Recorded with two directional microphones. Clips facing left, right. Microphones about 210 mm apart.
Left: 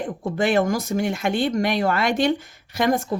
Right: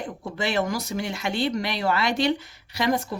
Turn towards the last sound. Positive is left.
turn(degrees=50)  # may be behind; listen again after turning